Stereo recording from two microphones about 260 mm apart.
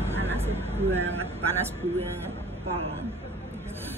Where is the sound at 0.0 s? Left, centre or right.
Centre.